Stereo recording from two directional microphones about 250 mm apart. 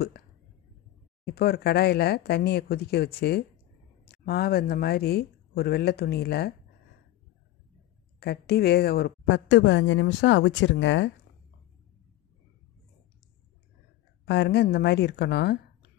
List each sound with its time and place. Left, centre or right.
1.2 s speech: left
8.2 s a woman's voice: left
14.2 s speech: left